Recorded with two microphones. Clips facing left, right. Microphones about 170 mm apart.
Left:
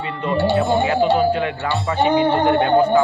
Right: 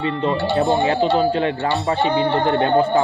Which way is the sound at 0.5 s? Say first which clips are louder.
Right 2 dB; 35° right (ahead or behind).